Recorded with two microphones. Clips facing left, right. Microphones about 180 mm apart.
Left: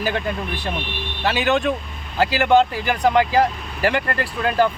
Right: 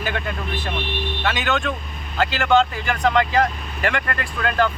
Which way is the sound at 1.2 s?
35° left (ahead or behind).